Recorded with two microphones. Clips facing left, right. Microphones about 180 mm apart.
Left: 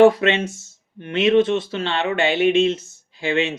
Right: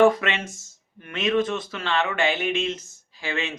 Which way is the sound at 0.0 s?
30° left (ahead or behind).